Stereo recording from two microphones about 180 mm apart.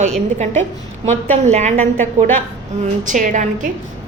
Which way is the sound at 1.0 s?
40° right (ahead or behind).